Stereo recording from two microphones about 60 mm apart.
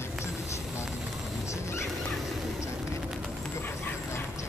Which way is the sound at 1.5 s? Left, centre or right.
Left.